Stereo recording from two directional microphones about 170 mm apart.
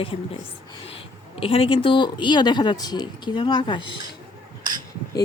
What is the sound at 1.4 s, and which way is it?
Speech, 35° left (ahead or behind).